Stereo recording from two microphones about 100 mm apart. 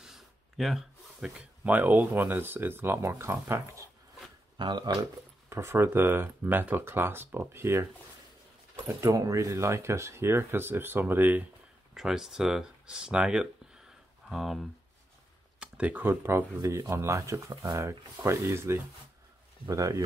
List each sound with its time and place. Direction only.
0.0 s a sound: centre (ahead or behind)
1.6 s speech: 15° right (ahead or behind)
4.6 s speech: 45° right (ahead or behind)
5.5 s speech: 25° right (ahead or behind)
8.8 s speech: 30° right (ahead or behind)
11.9 s speech: 5° right (ahead or behind)
15.6 s speech: 15° right (ahead or behind); by 20.0 s 35° right (ahead or behind)